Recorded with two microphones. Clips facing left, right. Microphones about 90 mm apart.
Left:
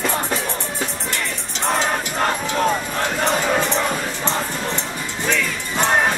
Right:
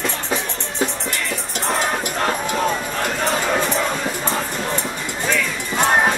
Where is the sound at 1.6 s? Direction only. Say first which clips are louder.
Left 1 dB; centre (ahead or behind).